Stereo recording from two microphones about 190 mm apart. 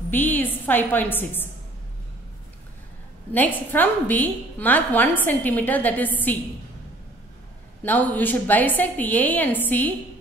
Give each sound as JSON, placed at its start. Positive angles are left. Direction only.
{"t": 0.1, "sound": "a woman's voice", "side_deg": 10}
{"t": 3.3, "sound": "a woman's voice", "side_deg": 10}
{"t": 7.8, "sound": "a woman's voice", "side_deg": 10}